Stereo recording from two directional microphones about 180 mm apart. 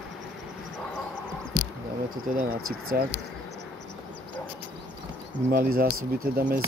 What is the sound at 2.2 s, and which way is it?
Speech, 55° right (ahead or behind).